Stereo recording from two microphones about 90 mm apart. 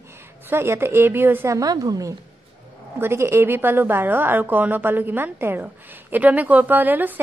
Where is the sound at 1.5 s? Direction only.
40° right (ahead or behind).